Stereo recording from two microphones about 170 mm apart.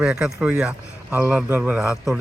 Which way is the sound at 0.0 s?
5° right (ahead or behind).